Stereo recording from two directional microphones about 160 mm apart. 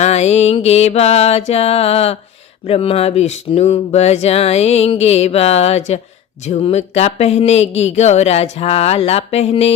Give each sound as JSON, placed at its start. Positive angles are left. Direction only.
{"t": 0.0, "sound": "speech", "side_deg": 45}